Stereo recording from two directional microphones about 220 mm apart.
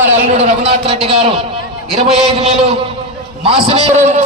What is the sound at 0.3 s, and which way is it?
A man's voice, 30° right (ahead or behind).